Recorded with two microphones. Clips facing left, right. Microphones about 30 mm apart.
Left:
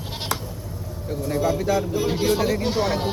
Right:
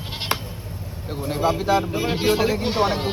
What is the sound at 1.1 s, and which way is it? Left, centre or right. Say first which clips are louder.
Speech: right 1 dB; right.